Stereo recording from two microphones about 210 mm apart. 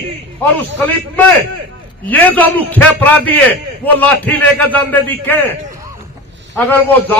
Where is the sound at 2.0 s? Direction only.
10° left (ahead or behind).